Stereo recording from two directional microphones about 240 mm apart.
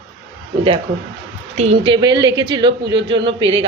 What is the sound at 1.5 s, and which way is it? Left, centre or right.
Speech, right.